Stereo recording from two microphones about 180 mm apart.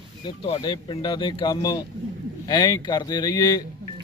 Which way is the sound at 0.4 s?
30° left (ahead or behind).